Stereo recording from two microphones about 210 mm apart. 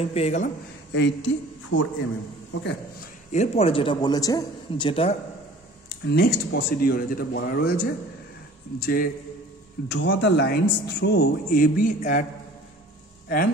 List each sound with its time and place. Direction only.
0.0 s speech: 30° left (ahead or behind)
0.9 s a man's voice: 60° left (ahead or behind)
3.3 s a man's voice: 30° left (ahead or behind)
5.9 s speech: 50° left (ahead or behind)
9.8 s speech: 55° left (ahead or behind); by 12.3 s 40° left (ahead or behind)